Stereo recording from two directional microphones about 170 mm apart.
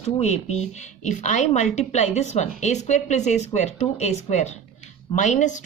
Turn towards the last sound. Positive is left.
turn(degrees=45)  # may be behind; listen again after turning